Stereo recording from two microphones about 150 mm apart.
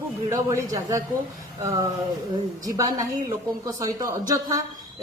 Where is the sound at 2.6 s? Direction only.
25° right (ahead or behind).